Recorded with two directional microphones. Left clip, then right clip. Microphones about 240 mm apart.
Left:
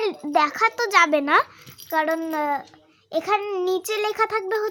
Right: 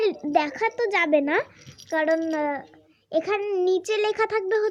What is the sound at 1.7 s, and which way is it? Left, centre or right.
A child's voice, centre.